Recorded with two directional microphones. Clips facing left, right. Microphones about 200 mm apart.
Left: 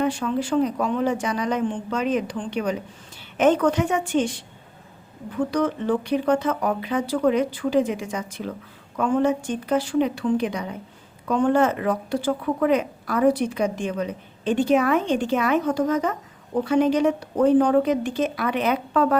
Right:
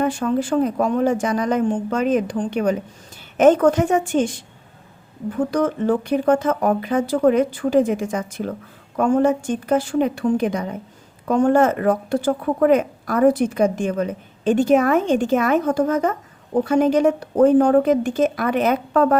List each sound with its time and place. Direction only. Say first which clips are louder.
0.0 s speech: right 3 dB; 45° right (ahead or behind)
5.5 s speech: right 3 dB; 50° right (ahead or behind)